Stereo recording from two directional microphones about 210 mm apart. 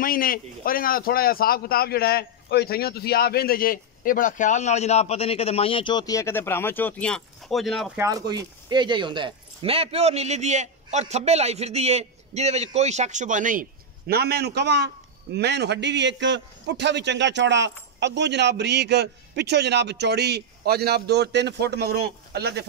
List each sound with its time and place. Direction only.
0.0 s a man's voice: 45° left (ahead or behind); by 8.0 s centre (ahead or behind)
8.0 s a man's voice: 15° right (ahead or behind); by 22.7 s 50° right (ahead or behind)